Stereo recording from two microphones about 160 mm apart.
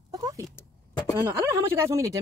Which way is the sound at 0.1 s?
20° right (ahead or behind).